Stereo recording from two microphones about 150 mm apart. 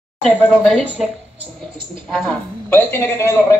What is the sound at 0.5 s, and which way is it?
Speech, 5° right (ahead or behind).